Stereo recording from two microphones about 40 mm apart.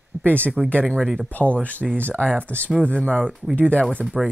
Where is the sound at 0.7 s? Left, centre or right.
Left.